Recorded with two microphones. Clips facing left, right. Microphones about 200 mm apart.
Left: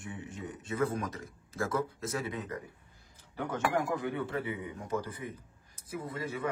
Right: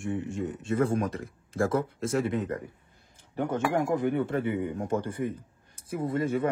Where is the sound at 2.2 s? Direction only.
50° right (ahead or behind).